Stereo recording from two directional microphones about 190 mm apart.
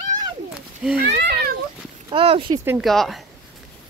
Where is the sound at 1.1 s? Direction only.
60° right (ahead or behind).